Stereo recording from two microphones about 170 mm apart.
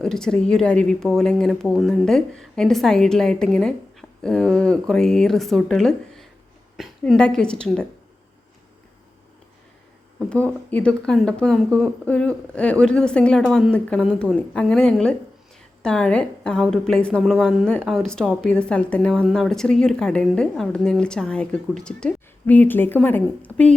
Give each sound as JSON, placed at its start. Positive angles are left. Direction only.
{"t": 0.0, "sound": "a woman's voice", "side_deg": 5}
{"t": 10.2, "sound": "a woman's voice", "side_deg": 5}